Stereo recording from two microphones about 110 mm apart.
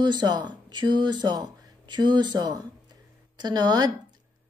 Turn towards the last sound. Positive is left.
turn(degrees=-40)  # may be behind; listen again after turning